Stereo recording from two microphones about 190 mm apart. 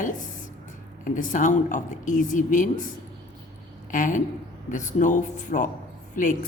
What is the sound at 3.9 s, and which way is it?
Speech, 45° left (ahead or behind).